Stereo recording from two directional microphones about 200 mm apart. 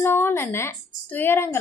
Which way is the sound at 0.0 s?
10° left (ahead or behind).